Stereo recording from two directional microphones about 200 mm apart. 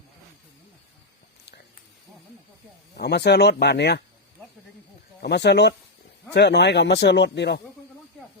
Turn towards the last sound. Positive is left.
turn(degrees=55)  # may be behind; listen again after turning